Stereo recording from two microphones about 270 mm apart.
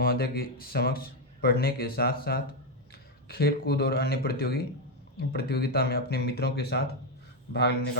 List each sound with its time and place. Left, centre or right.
0.0 s speech: left